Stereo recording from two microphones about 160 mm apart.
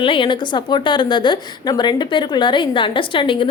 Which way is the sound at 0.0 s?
30° left (ahead or behind).